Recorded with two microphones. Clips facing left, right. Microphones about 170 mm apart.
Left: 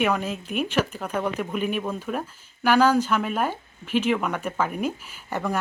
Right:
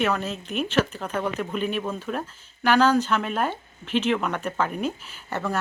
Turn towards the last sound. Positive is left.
turn(degrees=10)  # may be behind; listen again after turning